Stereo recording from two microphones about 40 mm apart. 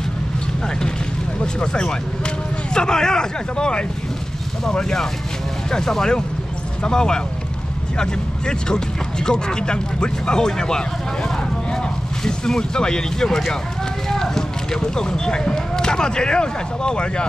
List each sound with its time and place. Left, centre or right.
1.4 s speech: left
12.3 s speech: centre